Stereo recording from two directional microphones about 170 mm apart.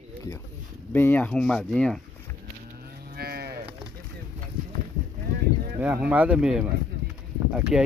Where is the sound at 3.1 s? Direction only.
65° right (ahead or behind).